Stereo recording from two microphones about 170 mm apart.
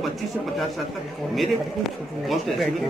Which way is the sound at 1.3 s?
Centre (ahead or behind).